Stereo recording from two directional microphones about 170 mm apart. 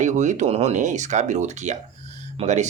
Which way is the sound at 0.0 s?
45° right (ahead or behind).